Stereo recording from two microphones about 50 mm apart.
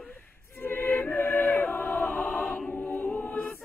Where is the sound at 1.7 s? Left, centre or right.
Left.